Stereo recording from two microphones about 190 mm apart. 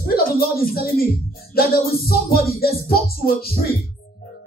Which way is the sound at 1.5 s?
50° left (ahead or behind).